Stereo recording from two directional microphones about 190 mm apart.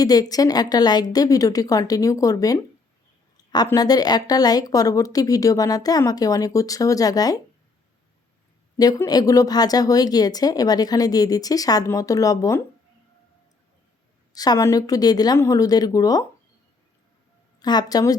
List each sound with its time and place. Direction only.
0.0 s speech: 20° left (ahead or behind)
8.8 s speech: 20° left (ahead or behind)
14.3 s speech: 20° left (ahead or behind)
17.6 s speech: 20° left (ahead or behind)